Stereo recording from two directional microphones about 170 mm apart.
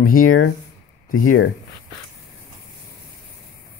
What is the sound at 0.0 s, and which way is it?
Speech, 55° left (ahead or behind).